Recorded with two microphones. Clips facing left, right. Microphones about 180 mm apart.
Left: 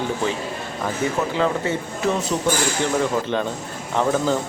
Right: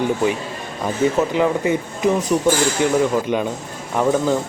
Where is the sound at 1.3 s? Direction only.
15° right (ahead or behind).